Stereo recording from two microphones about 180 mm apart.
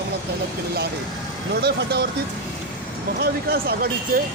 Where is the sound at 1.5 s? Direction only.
65° right (ahead or behind).